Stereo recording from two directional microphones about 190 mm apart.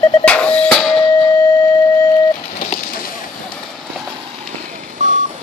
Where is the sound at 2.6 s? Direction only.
40° left (ahead or behind).